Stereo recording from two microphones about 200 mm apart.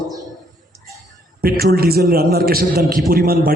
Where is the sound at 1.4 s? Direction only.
50° right (ahead or behind).